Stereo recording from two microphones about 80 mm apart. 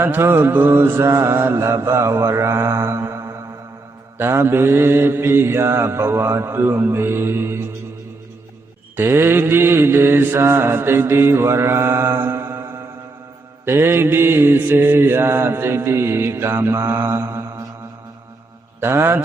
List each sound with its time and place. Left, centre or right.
0.0 s mantra: right
9.0 s mantra: right
18.8 s mantra: right